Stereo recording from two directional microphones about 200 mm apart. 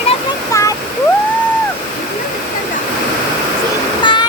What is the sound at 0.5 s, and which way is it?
Waterfall, 15° left (ahead or behind).